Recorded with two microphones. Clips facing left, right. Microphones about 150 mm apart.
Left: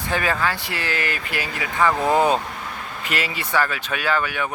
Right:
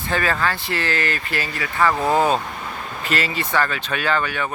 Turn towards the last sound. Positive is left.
turn(degrees=10)  # may be behind; listen again after turning